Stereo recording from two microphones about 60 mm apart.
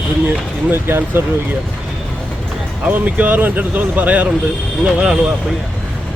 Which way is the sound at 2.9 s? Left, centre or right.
Right.